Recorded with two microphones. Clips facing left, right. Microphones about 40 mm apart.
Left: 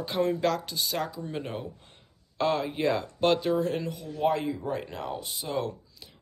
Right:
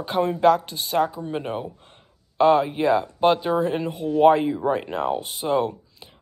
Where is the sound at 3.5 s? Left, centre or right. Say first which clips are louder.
Right 5 dB; right.